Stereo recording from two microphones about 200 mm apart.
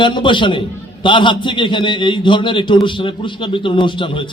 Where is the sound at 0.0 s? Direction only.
25° left (ahead or behind).